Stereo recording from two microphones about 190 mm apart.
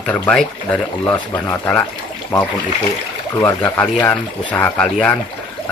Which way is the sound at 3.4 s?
10° left (ahead or behind).